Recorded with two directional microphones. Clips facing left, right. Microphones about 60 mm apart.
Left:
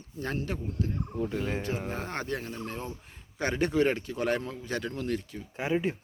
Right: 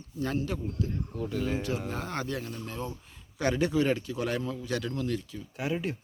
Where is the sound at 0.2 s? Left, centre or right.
Left.